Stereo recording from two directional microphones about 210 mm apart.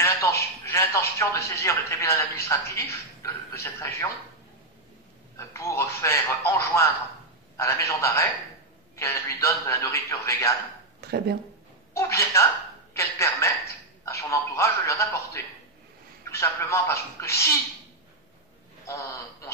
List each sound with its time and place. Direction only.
0.0 s a man's voice: 15° left (ahead or behind)
5.4 s a man's voice: 15° left (ahead or behind)
11.0 s speech: 50° right (ahead or behind)
11.9 s a man's voice: 15° left (ahead or behind)
18.9 s a man's voice: 15° left (ahead or behind)